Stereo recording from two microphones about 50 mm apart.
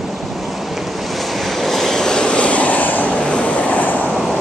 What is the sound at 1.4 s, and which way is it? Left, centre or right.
Vehicle, centre.